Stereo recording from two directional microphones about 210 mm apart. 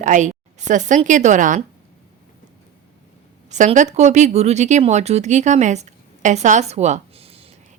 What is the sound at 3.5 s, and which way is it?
Speech, 35° right (ahead or behind).